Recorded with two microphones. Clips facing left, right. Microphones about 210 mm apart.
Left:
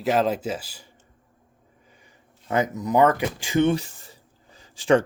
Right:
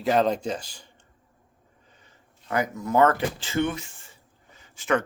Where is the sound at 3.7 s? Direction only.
35° left (ahead or behind).